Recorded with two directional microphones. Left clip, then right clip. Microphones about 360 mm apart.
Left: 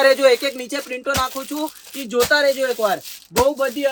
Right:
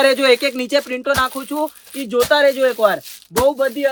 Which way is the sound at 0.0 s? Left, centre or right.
Centre.